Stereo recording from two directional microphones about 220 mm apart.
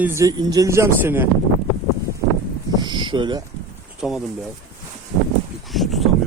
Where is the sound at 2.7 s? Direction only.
20° right (ahead or behind).